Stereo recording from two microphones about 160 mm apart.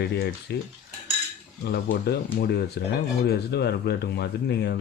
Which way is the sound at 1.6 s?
85° left.